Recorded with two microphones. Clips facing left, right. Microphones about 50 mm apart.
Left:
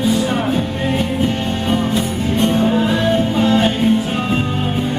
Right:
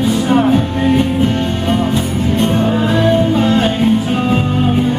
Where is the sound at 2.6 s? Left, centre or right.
Centre.